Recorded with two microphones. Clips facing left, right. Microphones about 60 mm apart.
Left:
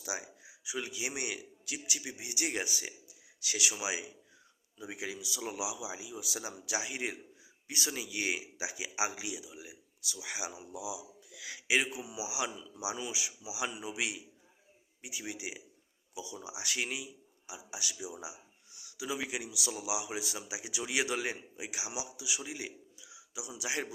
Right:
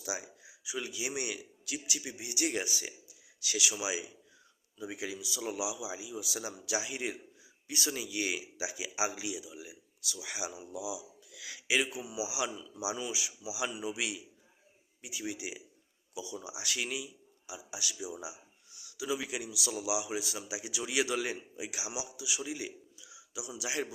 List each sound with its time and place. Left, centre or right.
0.0 s a man's voice: left